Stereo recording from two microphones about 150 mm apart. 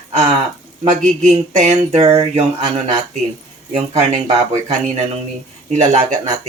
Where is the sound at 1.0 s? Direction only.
50° right (ahead or behind).